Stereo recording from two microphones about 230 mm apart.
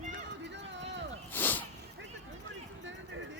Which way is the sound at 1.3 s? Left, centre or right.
Centre.